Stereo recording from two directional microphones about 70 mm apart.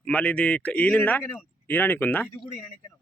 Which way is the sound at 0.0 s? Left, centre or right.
Centre.